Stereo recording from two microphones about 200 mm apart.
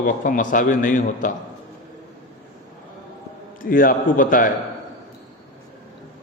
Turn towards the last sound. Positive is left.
turn(degrees=45)  # may be behind; listen again after turning